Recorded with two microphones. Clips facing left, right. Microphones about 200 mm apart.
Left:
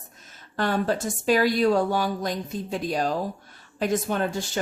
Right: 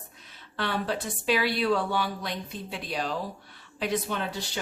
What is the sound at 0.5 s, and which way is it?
A woman's voice, 45° left (ahead or behind).